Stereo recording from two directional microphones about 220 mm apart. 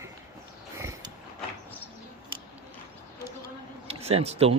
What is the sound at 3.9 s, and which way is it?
Speech, 25° right (ahead or behind).